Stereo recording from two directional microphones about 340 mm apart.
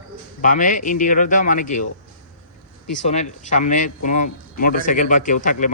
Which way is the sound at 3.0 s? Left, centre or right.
Centre.